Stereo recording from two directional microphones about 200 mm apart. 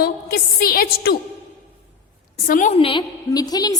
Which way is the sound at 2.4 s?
40° left (ahead or behind).